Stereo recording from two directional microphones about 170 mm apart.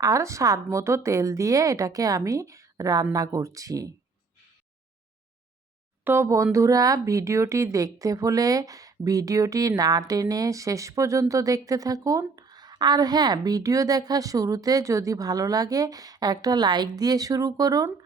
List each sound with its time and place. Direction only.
0.0 s speech: 20° right (ahead or behind)
6.1 s speech: 15° right (ahead or behind)